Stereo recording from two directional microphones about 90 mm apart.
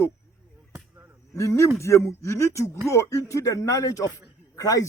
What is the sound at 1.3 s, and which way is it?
A man's voice, 35° left (ahead or behind).